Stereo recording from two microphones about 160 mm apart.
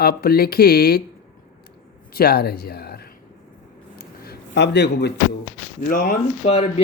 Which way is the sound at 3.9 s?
75° left (ahead or behind).